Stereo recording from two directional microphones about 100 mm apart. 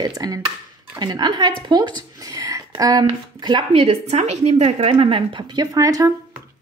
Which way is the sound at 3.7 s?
80° right.